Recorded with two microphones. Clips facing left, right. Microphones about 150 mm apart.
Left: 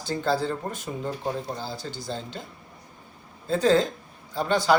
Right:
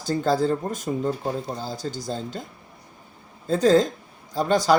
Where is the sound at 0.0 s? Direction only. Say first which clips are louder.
Right 4 dB; 45° right (ahead or behind).